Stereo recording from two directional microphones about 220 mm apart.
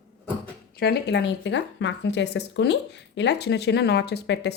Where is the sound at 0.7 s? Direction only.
50° left (ahead or behind).